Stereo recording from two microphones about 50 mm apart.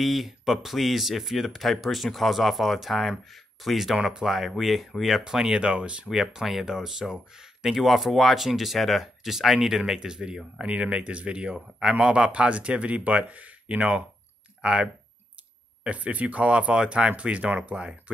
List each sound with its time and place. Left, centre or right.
0.0 s speech: centre; by 6.0 s right
6.0 s speech: centre
15.8 s speech: right